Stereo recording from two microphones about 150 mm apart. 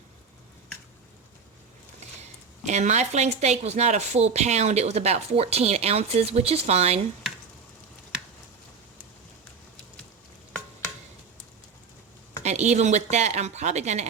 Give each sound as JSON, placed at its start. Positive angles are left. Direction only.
{"t": 2.6, "sound": "a woman's voice", "side_deg": -50}
{"t": 12.4, "sound": "a woman's voice", "side_deg": -50}